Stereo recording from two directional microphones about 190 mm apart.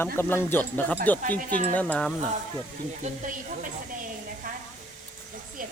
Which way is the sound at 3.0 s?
45° right (ahead or behind).